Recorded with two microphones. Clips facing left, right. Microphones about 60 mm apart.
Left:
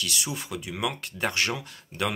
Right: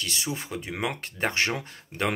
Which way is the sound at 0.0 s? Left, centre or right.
Right.